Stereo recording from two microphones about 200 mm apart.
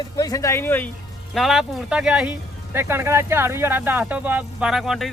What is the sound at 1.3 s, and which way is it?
Speech, centre (ahead or behind).